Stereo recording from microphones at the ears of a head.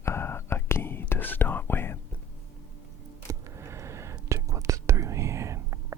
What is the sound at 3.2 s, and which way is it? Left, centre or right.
Whispering, right.